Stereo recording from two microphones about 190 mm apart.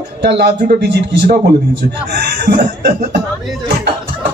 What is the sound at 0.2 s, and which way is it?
A man's voice, 60° right (ahead or behind).